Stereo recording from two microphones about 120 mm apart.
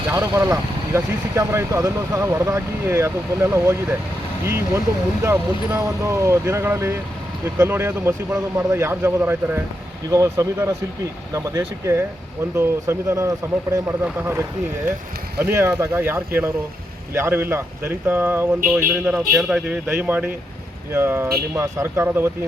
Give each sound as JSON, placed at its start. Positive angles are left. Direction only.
{"t": 0.1, "sound": "speech", "side_deg": -25}
{"t": 15.4, "sound": "speech", "side_deg": -25}